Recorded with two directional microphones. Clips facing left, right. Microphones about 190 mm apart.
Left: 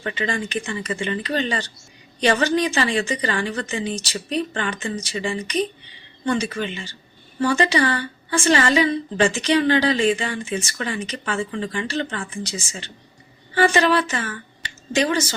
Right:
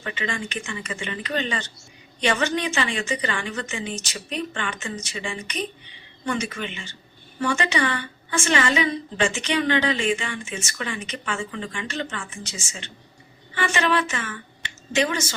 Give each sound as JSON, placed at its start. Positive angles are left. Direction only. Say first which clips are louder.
{"t": 0.0, "sound": "a woman's voice", "louder": "left 4 dB", "side_deg": 35}